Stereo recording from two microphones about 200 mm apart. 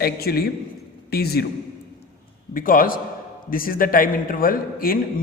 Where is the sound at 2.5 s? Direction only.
45° left (ahead or behind).